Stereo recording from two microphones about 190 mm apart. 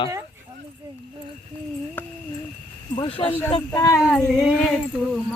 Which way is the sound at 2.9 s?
30° left (ahead or behind).